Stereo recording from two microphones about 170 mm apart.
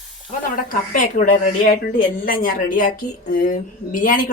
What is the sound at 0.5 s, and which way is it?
A woman's voice, 50° left (ahead or behind).